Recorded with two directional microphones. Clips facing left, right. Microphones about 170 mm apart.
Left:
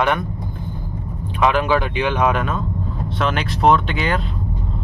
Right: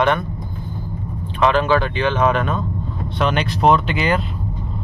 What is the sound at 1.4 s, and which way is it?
Speech, 10° left (ahead or behind).